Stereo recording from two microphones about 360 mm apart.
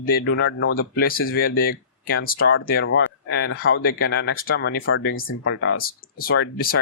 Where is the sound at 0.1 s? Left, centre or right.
Left.